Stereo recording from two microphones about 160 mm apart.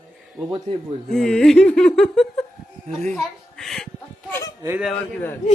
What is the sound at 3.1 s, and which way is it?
Speech, 5° left (ahead or behind).